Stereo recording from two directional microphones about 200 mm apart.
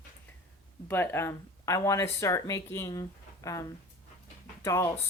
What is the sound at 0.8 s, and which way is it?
A woman's voice, 10° left (ahead or behind).